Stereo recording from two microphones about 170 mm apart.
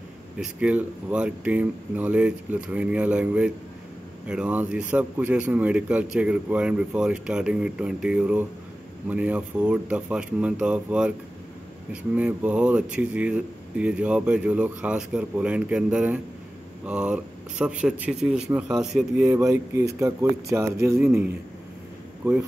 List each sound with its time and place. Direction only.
0.4 s speech: 5° right (ahead or behind)